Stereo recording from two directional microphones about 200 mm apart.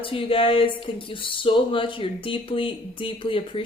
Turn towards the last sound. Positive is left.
turn(degrees=25)  # may be behind; listen again after turning